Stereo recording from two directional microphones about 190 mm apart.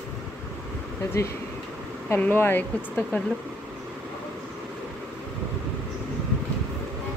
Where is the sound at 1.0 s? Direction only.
15° left (ahead or behind).